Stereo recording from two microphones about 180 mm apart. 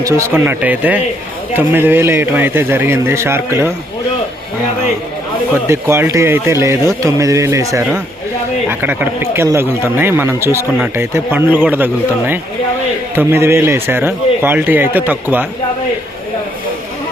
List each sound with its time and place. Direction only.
0.0 s speech: 10° right (ahead or behind)
5.6 s speech: 15° right (ahead or behind)